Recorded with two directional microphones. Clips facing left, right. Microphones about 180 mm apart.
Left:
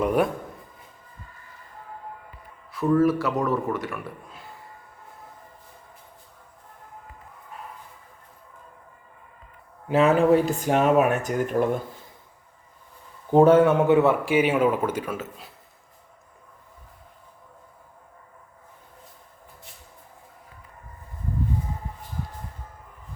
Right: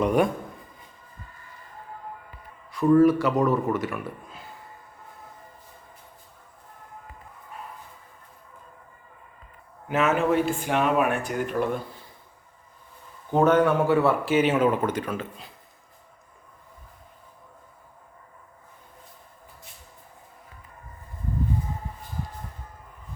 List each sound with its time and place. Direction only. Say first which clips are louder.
0.0 s a man's voice: even; 5° left (ahead or behind)
2.7 s a man's voice: right 3 dB; centre (ahead or behind)
9.9 s speech: left 4 dB; 30° left (ahead or behind)
13.3 s speech: left 4 dB; 30° left (ahead or behind); by 15.5 s 5° left (ahead or behind)